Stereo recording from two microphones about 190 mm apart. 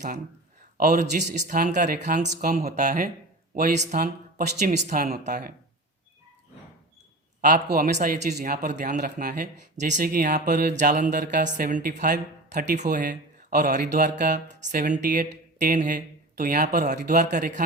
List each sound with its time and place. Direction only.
0.8 s speech: 45° right (ahead or behind)
2.1 s speech: 40° right (ahead or behind)
4.5 s speech: 40° right (ahead or behind)
7.4 s speech: 50° right (ahead or behind)